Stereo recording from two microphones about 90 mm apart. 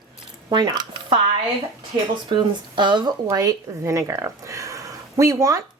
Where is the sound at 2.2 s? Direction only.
60° right (ahead or behind).